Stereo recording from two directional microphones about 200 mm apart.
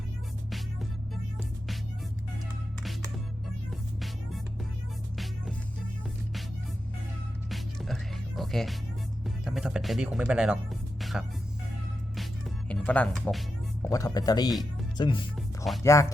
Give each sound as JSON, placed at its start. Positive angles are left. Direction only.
{"t": 5.1, "sound": "music", "side_deg": 0}
{"t": 7.5, "sound": "music", "side_deg": 0}
{"t": 9.2, "sound": "speech", "side_deg": 0}
{"t": 11.0, "sound": "music", "side_deg": 0}
{"t": 13.9, "sound": "speech", "side_deg": 20}
{"t": 15.4, "sound": "music", "side_deg": 0}
{"t": 15.8, "sound": "speech", "side_deg": 15}